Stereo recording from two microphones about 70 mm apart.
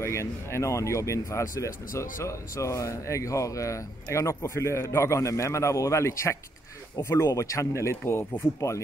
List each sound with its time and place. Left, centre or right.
0.0 s speech: left